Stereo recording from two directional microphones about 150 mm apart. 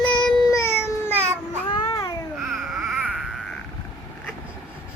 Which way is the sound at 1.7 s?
25° left (ahead or behind).